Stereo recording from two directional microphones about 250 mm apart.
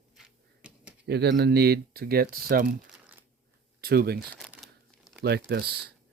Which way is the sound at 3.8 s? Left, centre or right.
Right.